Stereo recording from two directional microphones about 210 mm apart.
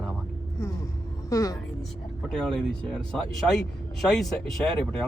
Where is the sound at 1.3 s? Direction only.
15° left (ahead or behind).